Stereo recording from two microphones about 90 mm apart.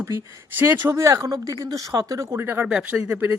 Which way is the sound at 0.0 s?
30° right (ahead or behind).